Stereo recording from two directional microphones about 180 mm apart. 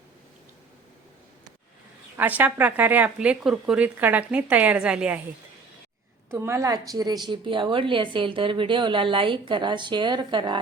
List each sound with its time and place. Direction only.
2.1 s a woman's voice: 10° right (ahead or behind)
6.3 s a woman's voice: 15° right (ahead or behind)